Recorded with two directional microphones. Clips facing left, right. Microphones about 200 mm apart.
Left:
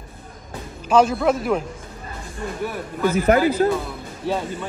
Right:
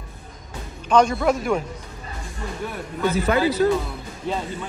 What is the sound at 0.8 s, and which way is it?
Speech, 5° left (ahead or behind).